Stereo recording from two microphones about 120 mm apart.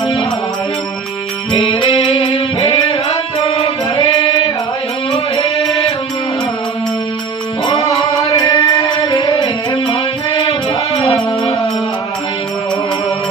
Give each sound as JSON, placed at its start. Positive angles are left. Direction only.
{"t": 1.5, "sound": "music", "side_deg": 45}
{"t": 8.3, "sound": "music", "side_deg": 35}
{"t": 10.9, "sound": "music", "side_deg": 55}